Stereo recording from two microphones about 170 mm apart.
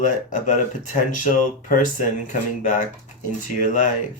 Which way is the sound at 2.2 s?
45° left (ahead or behind).